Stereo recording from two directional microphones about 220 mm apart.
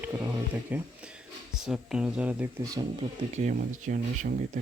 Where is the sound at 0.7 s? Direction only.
5° right (ahead or behind).